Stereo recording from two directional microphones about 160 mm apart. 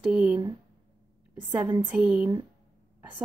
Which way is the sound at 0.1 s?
5° right (ahead or behind).